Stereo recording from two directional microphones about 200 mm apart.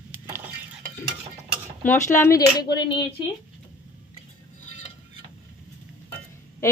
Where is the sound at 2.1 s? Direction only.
15° left (ahead or behind).